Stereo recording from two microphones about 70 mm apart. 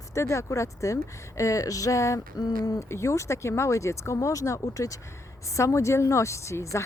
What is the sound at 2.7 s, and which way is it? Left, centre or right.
Speech, left.